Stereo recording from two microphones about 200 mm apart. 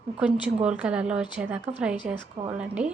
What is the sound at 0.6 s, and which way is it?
A woman's voice, 5° right (ahead or behind).